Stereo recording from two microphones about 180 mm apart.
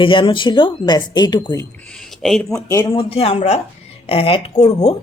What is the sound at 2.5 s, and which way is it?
Speech, 20° left (ahead or behind).